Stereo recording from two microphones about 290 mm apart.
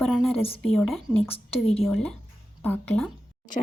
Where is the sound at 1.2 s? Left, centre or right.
Centre.